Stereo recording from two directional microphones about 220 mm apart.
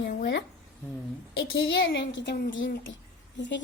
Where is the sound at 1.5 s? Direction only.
50° left (ahead or behind).